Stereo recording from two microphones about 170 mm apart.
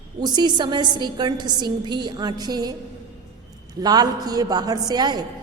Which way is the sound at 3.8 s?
25° right (ahead or behind).